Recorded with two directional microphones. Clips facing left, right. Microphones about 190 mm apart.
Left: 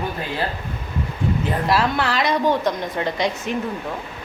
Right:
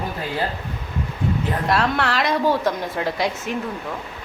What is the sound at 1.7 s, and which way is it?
Speech, centre (ahead or behind).